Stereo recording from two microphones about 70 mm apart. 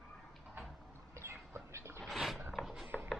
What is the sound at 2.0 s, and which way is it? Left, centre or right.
Mechanisms, centre.